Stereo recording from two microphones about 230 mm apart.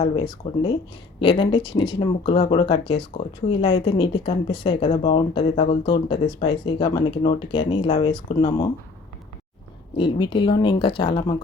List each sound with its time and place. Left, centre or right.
0.4 s speech: centre
10.0 s speech: left